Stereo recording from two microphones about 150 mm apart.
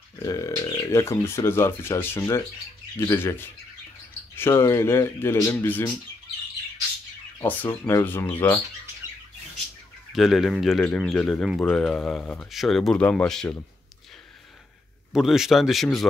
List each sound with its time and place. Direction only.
0.2 s speech: 25° left (ahead or behind)
7.3 s speech: 15° left (ahead or behind)
10.1 s speech: centre (ahead or behind)
15.1 s speech: 5° right (ahead or behind)